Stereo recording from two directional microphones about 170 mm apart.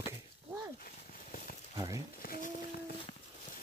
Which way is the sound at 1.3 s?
50° left (ahead or behind).